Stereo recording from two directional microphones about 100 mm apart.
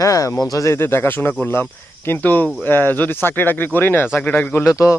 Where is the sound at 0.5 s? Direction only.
30° left (ahead or behind).